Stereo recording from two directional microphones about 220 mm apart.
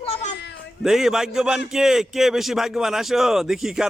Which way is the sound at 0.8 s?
Centre (ahead or behind).